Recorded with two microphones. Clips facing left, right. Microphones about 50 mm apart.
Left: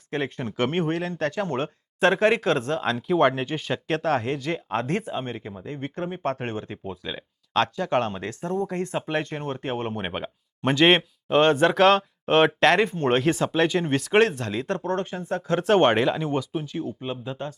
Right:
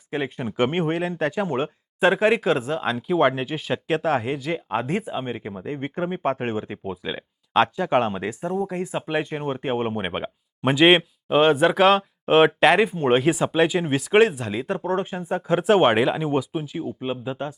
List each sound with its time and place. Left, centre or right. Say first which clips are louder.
0.1 s speech: right 1 dB; centre